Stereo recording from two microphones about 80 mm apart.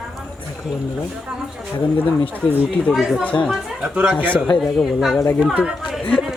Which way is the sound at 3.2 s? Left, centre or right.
Centre.